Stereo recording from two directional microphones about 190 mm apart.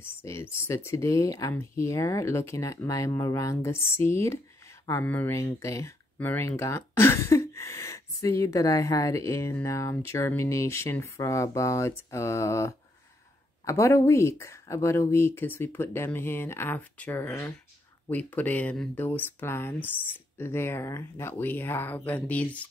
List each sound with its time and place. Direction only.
0.0 s speech: 15° left (ahead or behind)